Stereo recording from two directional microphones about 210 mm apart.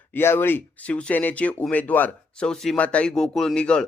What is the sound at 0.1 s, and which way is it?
Speech, 10° left (ahead or behind).